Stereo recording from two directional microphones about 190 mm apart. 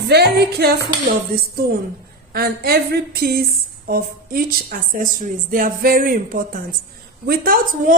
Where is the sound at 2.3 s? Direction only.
55° right (ahead or behind).